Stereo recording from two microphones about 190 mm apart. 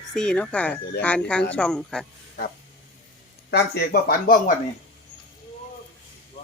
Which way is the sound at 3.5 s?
60° left (ahead or behind).